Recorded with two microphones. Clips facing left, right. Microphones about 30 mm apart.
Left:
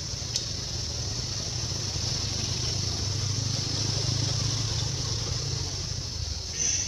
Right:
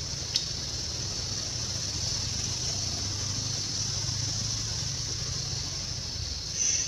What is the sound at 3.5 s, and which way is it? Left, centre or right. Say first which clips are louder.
Vehicle: left 2 dB; left.